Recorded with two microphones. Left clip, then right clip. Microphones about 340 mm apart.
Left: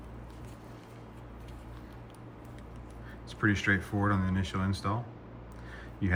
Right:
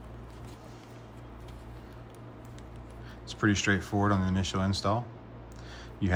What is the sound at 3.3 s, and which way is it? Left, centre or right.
Speech, centre.